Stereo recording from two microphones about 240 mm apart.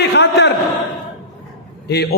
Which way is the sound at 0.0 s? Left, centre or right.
Left.